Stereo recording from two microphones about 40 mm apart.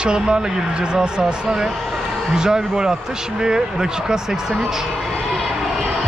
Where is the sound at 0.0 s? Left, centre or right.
Right.